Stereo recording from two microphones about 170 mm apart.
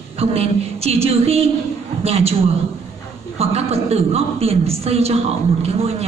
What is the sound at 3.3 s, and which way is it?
A man's voice, 35° right (ahead or behind).